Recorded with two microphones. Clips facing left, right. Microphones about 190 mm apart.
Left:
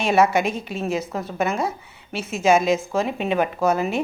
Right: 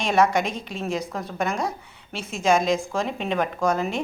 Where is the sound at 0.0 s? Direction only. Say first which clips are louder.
Left 2 dB; 5° left (ahead or behind).